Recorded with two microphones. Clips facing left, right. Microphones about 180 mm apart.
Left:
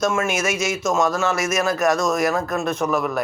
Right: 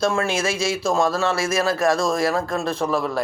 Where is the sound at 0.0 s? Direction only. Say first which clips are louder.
Even; 30° right (ahead or behind).